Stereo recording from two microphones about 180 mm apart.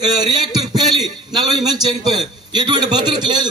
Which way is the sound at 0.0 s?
25° right (ahead or behind).